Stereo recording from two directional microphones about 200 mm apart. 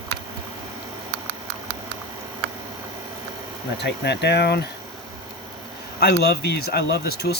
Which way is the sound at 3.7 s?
60° left (ahead or behind).